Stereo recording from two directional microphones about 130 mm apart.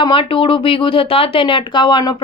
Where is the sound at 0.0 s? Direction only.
40° left (ahead or behind).